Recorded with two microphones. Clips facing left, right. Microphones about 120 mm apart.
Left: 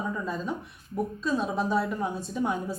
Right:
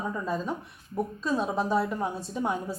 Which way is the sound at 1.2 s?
35° right (ahead or behind).